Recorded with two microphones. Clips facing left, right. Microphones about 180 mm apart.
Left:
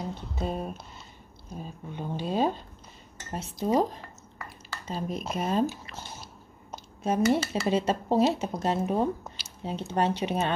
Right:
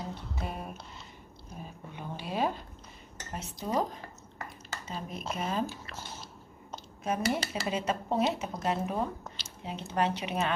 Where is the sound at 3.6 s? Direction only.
35° left (ahead or behind).